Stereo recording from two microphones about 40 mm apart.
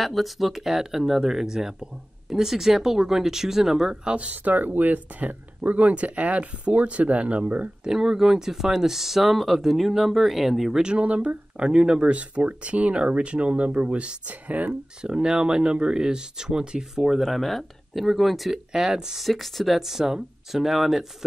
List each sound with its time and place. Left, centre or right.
0.0 s speech: centre; by 4.3 s right
4.3 s speech: right
7.8 s speech: centre
10.8 s speech: right
12.0 s speech: right
14.2 s speech: right
15.0 s speech: right
16.9 s speech: centre
18.7 s speech: centre
19.2 s speech: centre